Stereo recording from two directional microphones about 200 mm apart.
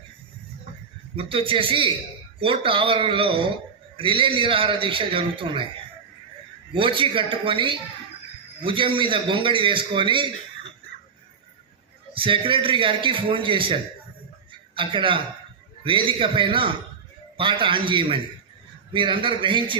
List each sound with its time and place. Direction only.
1.1 s a man's voice: 25° right (ahead or behind)
6.7 s a man's voice: 25° right (ahead or behind)
12.1 s a man's voice: 25° right (ahead or behind)
14.8 s a man's voice: 25° right (ahead or behind)